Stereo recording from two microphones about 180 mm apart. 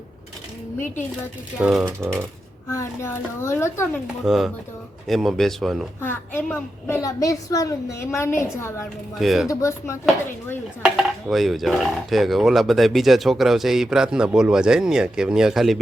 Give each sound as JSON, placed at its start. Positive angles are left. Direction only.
{"t": 1.5, "sound": "speech", "side_deg": -5}
{"t": 2.6, "sound": "a woman's voice", "side_deg": 15}
{"t": 4.0, "sound": "speech", "side_deg": 0}
{"t": 6.0, "sound": "a woman's voice", "side_deg": 10}
{"t": 9.1, "sound": "speech", "side_deg": 0}
{"t": 9.5, "sound": "a woman's voice", "side_deg": 15}
{"t": 10.8, "sound": "speech", "side_deg": -5}